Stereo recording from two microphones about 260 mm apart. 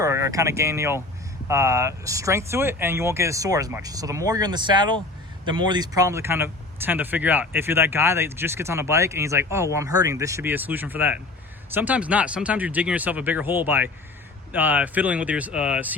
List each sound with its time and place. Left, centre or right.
0.0 s speech: centre